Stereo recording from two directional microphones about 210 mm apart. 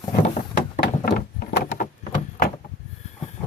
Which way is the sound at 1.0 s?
40° left (ahead or behind).